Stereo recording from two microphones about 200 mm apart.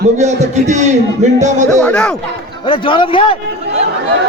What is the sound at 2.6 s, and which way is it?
Speech, 25° left (ahead or behind).